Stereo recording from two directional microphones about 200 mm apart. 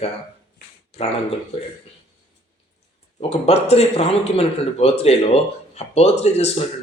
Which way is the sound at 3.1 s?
30° left (ahead or behind).